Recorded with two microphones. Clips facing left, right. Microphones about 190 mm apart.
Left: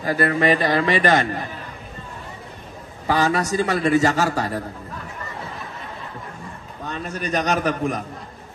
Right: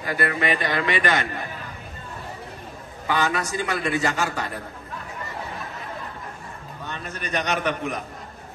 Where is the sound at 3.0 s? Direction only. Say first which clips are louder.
Left 4 dB; 35° left (ahead or behind).